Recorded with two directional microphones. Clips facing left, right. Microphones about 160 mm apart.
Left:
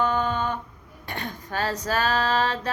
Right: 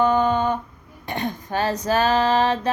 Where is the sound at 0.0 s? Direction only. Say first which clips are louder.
Right 6 dB; 15° right (ahead or behind).